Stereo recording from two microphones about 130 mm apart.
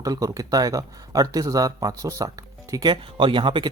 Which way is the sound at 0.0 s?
25° right (ahead or behind).